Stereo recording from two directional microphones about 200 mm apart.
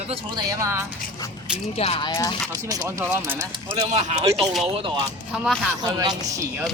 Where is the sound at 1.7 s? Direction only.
30° left (ahead or behind).